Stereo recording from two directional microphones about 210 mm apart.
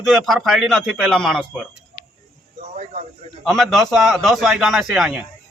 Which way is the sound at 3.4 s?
Centre (ahead or behind).